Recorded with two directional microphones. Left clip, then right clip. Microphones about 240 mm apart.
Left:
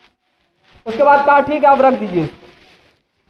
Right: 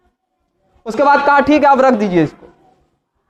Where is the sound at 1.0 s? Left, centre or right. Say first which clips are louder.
Even; right.